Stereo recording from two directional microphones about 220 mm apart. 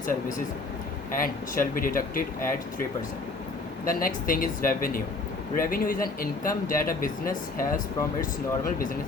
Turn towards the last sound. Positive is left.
turn(degrees=40)  # may be behind; listen again after turning